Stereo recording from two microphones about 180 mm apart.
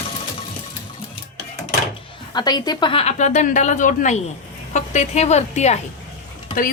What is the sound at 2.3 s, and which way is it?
A woman's voice, 25° left (ahead or behind).